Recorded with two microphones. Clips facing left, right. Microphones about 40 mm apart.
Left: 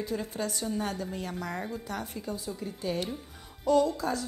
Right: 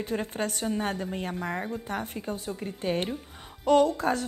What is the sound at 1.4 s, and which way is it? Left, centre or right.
A woman's voice, right.